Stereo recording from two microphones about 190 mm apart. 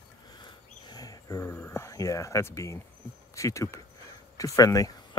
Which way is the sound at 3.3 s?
15° left (ahead or behind).